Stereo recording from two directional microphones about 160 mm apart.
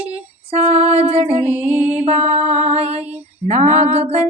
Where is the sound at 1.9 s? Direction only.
45° right (ahead or behind).